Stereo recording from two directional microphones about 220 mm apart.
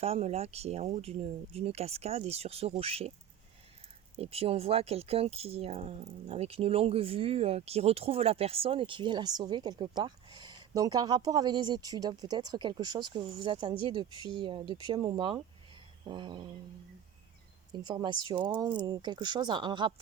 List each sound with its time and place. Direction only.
0.0 s speech: 30° right (ahead or behind)
4.2 s speech: 25° right (ahead or behind)
17.7 s speech: 20° right (ahead or behind)